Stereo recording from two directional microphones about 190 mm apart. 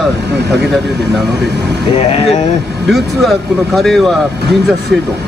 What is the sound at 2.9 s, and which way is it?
Speech, centre (ahead or behind).